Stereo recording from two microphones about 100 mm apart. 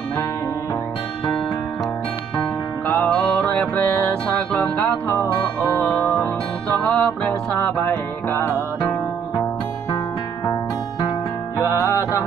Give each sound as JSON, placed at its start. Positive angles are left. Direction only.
{"t": 3.0, "sound": "music", "side_deg": 10}
{"t": 4.6, "sound": "music", "side_deg": 25}
{"t": 10.4, "sound": "music", "side_deg": 35}